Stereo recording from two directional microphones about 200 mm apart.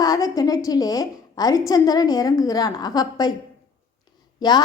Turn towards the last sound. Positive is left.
turn(degrees=20)  # may be behind; listen again after turning